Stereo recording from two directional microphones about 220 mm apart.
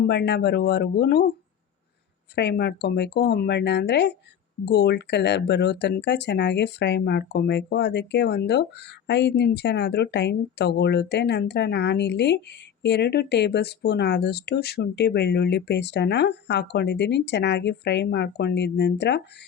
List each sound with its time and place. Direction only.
0.0 s speech: 50° left (ahead or behind)
2.3 s speech: 50° left (ahead or behind)